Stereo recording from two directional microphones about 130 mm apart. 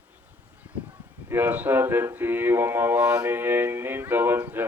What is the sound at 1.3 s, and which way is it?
Speech, 15° right (ahead or behind).